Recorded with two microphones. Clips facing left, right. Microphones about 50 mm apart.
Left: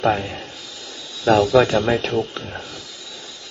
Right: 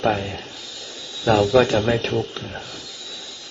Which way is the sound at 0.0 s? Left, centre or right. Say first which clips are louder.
Left 2 dB; centre.